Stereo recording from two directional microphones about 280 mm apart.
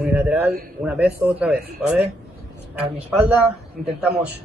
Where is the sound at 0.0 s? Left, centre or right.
Centre.